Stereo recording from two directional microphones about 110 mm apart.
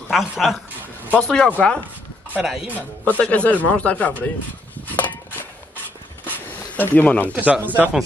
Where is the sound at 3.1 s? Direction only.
10° left (ahead or behind).